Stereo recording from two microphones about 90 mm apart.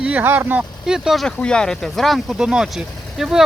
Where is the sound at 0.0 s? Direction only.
15° right (ahead or behind).